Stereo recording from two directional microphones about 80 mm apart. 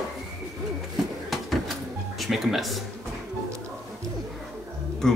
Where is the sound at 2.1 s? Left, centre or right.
Centre.